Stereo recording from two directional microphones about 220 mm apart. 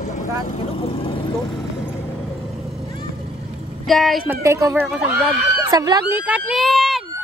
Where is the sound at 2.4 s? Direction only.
Centre (ahead or behind).